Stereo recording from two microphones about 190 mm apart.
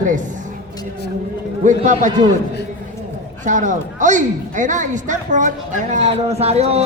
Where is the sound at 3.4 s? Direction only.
40° right (ahead or behind).